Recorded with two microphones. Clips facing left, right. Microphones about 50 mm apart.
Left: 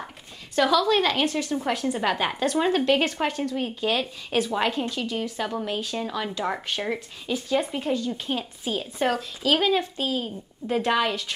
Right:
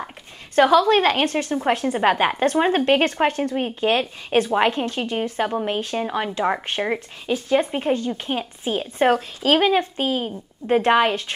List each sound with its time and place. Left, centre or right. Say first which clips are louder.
0.6 s speech: right 5 dB; right